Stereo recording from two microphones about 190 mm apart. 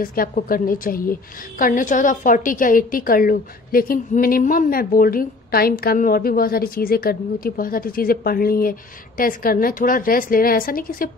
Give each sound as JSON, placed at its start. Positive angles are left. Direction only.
{"t": 0.0, "sound": "a woman's voice", "side_deg": 50}